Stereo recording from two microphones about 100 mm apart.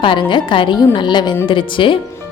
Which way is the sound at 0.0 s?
50° left (ahead or behind).